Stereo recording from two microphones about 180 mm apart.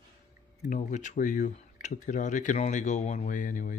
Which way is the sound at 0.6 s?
45° left (ahead or behind).